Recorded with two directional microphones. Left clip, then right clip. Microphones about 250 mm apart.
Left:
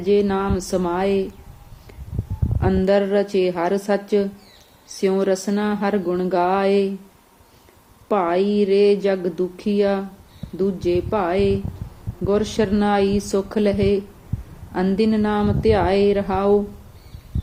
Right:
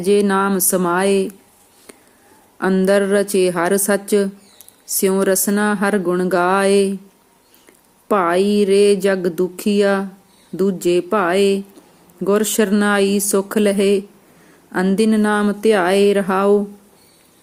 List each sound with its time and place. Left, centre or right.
0.0 s speech: right
2.6 s speech: centre
8.0 s speech: centre